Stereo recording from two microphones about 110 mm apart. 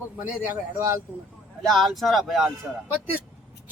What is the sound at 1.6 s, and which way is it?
Speech, 5° left (ahead or behind).